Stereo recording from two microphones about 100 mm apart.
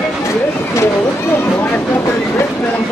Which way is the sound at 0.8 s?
25° left (ahead or behind).